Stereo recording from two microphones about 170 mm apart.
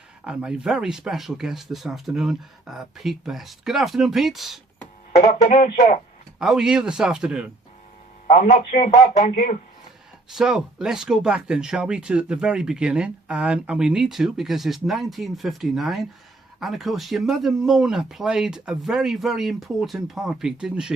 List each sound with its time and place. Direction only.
0.3 s speech: 5° right (ahead or behind)
5.1 s a man's voice: 45° left (ahead or behind)
6.4 s speech: 5° right (ahead or behind)
8.3 s a man's voice: 45° left (ahead or behind)
10.2 s speech: 5° right (ahead or behind)